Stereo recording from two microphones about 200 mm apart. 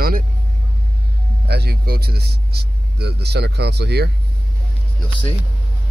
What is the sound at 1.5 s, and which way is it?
Speech, 50° right (ahead or behind).